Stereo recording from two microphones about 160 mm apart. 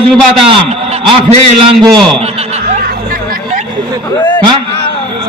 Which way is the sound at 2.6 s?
75° right (ahead or behind).